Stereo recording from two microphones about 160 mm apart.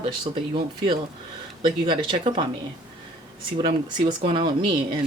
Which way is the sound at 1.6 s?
30° right (ahead or behind).